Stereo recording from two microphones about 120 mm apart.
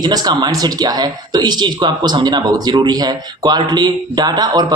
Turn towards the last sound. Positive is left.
turn(degrees=-35)  # may be behind; listen again after turning